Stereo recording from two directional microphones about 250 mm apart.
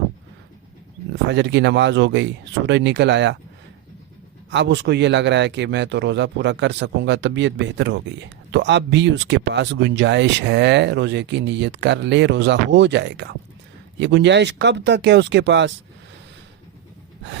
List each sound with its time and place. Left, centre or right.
1.3 s speech: right
4.5 s speech: right